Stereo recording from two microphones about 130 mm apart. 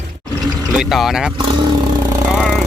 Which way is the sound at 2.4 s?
Centre (ahead or behind).